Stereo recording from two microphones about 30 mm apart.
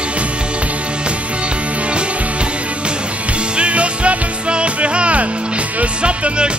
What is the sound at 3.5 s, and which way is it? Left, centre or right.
Music, right.